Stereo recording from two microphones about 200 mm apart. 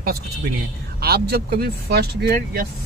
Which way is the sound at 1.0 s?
50° right (ahead or behind).